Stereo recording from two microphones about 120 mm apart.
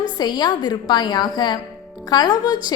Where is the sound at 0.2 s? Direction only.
35° left (ahead or behind).